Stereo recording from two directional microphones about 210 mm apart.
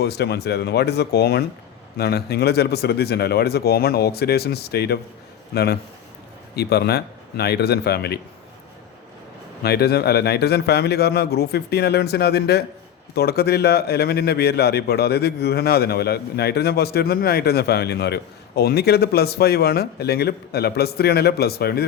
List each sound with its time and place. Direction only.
0.0 s a man's voice: 50° left (ahead or behind)
6.6 s a man's voice: 50° left (ahead or behind)
9.6 s a man's voice: 50° left (ahead or behind)